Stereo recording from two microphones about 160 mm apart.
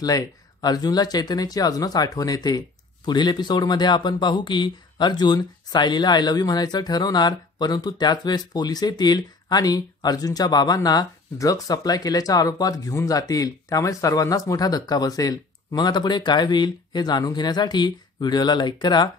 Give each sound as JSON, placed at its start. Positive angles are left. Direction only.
{"t": 0.0, "sound": "speech", "side_deg": 20}